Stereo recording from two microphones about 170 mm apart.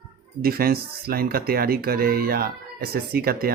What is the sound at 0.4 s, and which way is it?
Speech, 60° right (ahead or behind).